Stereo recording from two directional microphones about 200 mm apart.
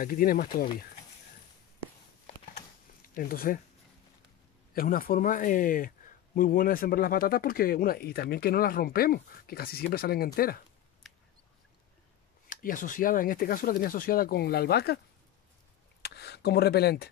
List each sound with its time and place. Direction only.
0.0 s speech: 45° left (ahead or behind)
3.2 s speech: 45° left (ahead or behind)
4.7 s speech: 45° left (ahead or behind)
12.4 s speech: 40° left (ahead or behind)
16.0 s speech: 55° left (ahead or behind)